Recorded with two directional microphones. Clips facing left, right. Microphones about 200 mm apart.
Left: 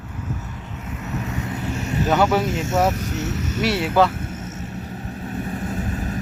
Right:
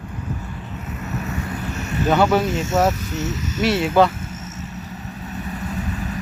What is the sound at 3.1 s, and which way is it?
Speech, 60° left (ahead or behind).